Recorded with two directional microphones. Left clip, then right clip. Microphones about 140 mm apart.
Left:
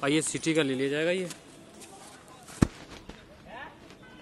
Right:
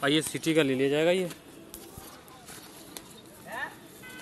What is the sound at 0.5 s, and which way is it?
Speech, 10° right (ahead or behind).